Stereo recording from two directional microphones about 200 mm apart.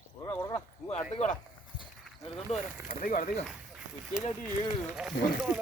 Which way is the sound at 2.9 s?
45° left (ahead or behind).